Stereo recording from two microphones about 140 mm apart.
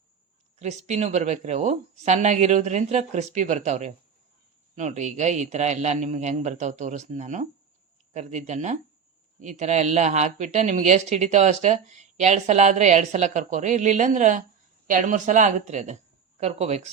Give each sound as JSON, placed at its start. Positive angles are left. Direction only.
{"t": 0.6, "sound": "speech", "side_deg": -55}